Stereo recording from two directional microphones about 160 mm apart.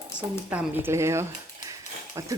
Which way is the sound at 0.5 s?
10° right (ahead or behind).